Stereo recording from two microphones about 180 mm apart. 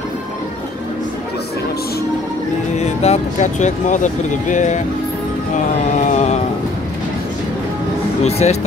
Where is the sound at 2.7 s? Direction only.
40° left (ahead or behind).